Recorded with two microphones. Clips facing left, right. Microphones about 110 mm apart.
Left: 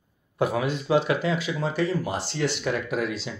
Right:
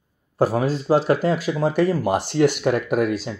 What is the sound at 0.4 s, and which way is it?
Speech, 35° right (ahead or behind).